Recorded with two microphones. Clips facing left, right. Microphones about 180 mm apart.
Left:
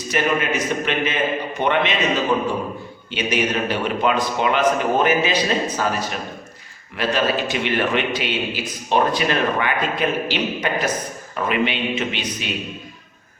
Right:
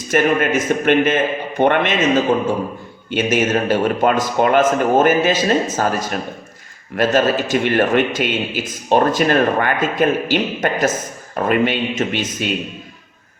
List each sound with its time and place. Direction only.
0.1 s a man's voice: 50° right (ahead or behind)
3.1 s a man's voice: 50° right (ahead or behind)